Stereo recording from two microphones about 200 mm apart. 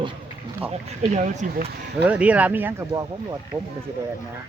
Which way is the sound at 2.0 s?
5° right (ahead or behind).